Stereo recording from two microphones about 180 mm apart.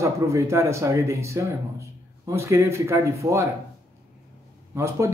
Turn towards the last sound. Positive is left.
turn(degrees=-15)  # may be behind; listen again after turning